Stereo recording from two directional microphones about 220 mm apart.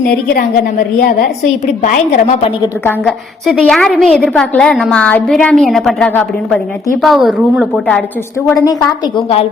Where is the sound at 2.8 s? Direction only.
Centre (ahead or behind).